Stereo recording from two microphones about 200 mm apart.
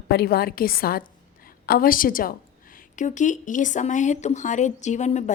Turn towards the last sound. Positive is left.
turn(degrees=35)  # may be behind; listen again after turning